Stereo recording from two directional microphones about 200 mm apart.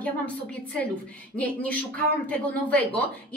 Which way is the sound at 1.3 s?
5° left (ahead or behind).